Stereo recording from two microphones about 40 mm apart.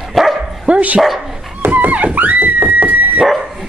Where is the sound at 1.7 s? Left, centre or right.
Right.